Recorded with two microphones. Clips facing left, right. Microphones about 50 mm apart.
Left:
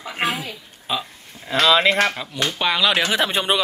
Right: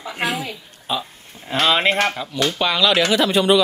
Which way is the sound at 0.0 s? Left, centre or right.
Left.